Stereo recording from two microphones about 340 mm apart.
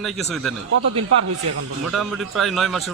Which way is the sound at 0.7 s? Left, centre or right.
Right.